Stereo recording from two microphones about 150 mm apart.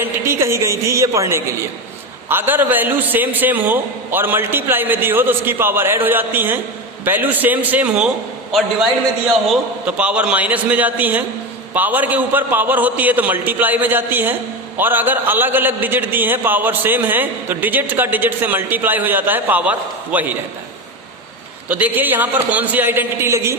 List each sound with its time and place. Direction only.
0.0 s a woman's voice: 15° right (ahead or behind)
21.7 s a man's voice: 10° right (ahead or behind)